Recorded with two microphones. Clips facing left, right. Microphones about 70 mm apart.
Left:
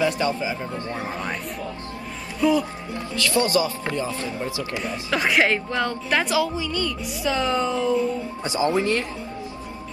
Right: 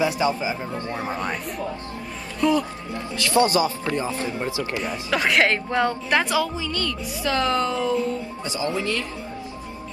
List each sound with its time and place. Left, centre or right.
0.0 s speech: centre
0.9 s speech: centre
2.4 s speech: centre
3.3 s speech: right
5.1 s speech: centre
5.7 s speech: centre
6.2 s a woman's voice: centre
8.5 s speech: left